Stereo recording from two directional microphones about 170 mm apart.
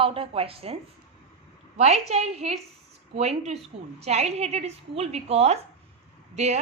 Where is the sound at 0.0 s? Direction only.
30° right (ahead or behind).